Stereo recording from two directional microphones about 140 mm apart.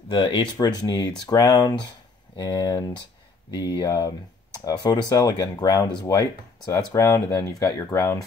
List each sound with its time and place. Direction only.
0.1 s speech: 35° left (ahead or behind)